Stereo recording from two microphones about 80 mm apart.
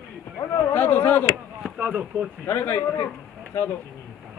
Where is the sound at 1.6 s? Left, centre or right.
Centre.